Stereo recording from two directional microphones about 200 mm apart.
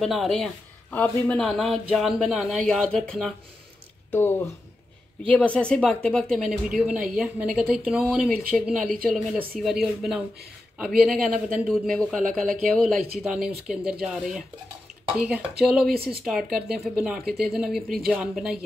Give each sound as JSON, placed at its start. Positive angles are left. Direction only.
{"t": 0.0, "sound": "speech", "side_deg": 0}
{"t": 15.9, "sound": "speech", "side_deg": -50}
{"t": 16.3, "sound": "speech", "side_deg": 0}